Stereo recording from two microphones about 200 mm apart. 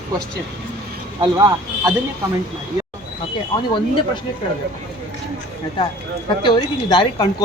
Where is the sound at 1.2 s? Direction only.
15° right (ahead or behind).